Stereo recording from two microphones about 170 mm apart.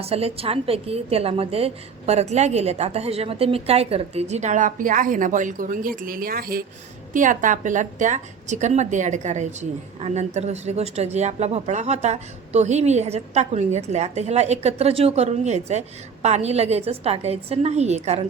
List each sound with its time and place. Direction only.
0.0 s a woman's voice: 35° right (ahead or behind); by 6.7 s 60° right (ahead or behind)
7.1 s a woman's voice: 50° right (ahead or behind)